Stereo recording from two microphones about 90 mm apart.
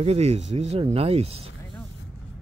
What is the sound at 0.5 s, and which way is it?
Speech, 90° right.